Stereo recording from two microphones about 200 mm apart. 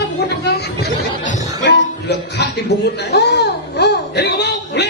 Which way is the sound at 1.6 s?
55° left (ahead or behind).